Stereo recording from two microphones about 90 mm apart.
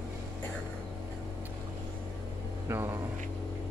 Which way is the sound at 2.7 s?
30° right (ahead or behind).